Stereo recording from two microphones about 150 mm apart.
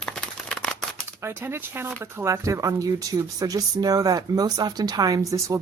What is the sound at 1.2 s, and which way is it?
Speech, 15° right (ahead or behind).